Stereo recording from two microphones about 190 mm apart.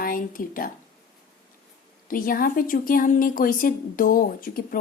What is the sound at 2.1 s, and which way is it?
A woman's voice, 50° left (ahead or behind).